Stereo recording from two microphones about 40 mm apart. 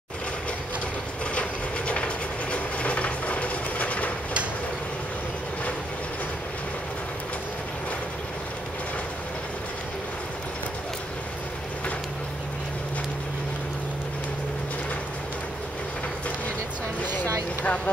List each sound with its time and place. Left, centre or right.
1.3 s a sound: left
2.5 s train: left
17.0 s vehicle: left